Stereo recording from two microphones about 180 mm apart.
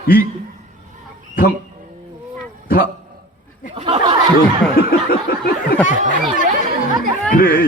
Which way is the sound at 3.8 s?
30° right (ahead or behind).